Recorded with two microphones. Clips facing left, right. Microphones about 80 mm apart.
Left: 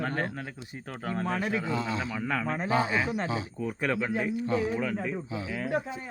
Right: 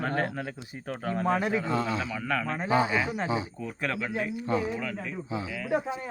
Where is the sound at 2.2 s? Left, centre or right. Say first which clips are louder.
Even; centre.